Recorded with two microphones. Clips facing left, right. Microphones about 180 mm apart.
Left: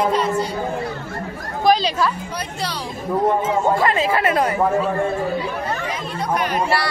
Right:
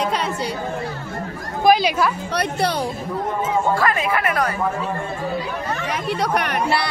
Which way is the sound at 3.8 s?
25° left (ahead or behind).